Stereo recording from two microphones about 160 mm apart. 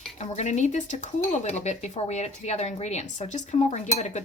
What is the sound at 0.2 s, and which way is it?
Speech, 45° left (ahead or behind).